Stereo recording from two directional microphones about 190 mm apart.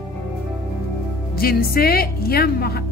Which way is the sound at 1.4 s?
50° left (ahead or behind).